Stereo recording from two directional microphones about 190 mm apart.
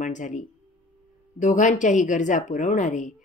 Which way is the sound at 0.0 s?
40° left (ahead or behind).